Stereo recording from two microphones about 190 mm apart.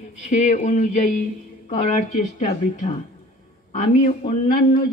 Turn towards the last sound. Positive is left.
turn(degrees=50)  # may be behind; listen again after turning